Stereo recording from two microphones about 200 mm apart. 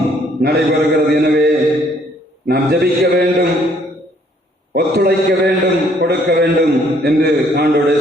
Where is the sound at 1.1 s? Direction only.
55° right (ahead or behind).